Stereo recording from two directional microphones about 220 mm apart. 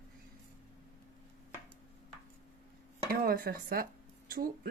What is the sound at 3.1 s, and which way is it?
Speech, 40° right (ahead or behind).